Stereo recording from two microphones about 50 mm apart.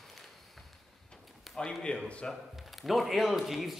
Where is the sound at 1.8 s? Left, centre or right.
Left.